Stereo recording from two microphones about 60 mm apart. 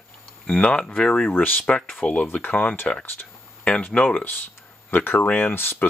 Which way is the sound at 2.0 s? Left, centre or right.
Left.